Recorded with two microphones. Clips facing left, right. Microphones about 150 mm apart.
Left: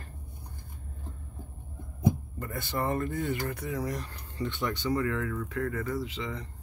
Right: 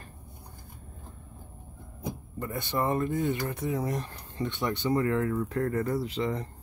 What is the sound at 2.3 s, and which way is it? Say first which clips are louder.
Speech: right 3 dB; 20° right (ahead or behind).